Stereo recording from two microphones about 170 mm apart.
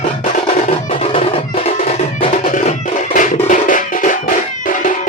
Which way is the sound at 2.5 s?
50° left (ahead or behind).